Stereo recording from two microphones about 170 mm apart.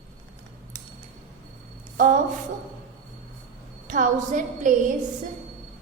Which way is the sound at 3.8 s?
45° right (ahead or behind).